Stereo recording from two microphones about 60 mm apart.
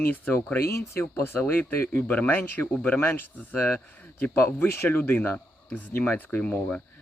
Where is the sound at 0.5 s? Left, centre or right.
Left.